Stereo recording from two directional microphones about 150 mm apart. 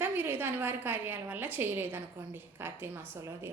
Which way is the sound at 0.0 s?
15° right (ahead or behind).